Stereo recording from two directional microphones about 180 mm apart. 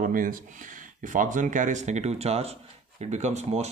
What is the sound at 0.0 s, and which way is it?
Speech, 50° right (ahead or behind).